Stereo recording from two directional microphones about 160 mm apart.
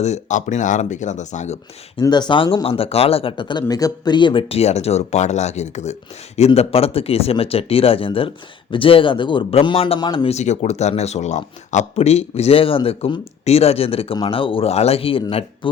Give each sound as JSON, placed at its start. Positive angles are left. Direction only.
{"t": 0.0, "sound": "speech", "side_deg": 45}
{"t": 2.0, "sound": "speech", "side_deg": 25}
{"t": 10.3, "sound": "speech", "side_deg": 45}